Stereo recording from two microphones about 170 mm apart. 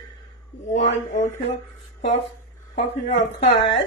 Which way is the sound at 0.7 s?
45° left (ahead or behind).